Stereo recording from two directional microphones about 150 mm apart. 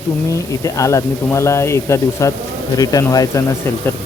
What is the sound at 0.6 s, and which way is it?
Speech, 20° left (ahead or behind).